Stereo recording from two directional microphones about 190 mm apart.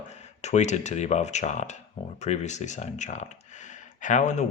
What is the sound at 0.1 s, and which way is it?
Speech, 35° left (ahead or behind).